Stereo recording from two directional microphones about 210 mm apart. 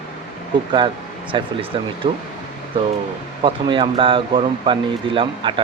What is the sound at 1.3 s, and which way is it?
Speech, 25° right (ahead or behind).